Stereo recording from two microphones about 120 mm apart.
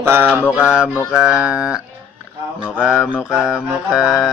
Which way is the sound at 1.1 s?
5° right (ahead or behind).